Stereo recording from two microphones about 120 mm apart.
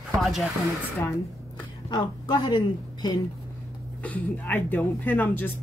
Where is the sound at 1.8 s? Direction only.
40° left (ahead or behind).